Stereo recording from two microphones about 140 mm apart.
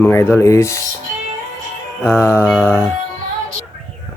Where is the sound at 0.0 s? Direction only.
20° left (ahead or behind).